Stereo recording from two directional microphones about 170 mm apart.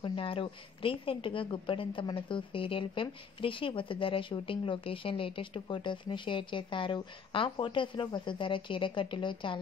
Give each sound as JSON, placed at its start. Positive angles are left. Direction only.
{"t": 0.0, "sound": "a woman's voice", "side_deg": 30}